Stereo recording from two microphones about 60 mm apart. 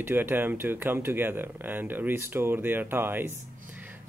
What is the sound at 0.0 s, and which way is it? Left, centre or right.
Speech, right.